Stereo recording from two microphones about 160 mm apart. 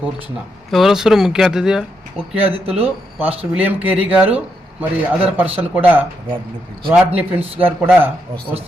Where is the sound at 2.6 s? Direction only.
40° right (ahead or behind).